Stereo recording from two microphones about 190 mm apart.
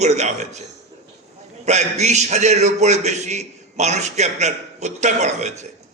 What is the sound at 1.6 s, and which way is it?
A man's voice, 35° right (ahead or behind).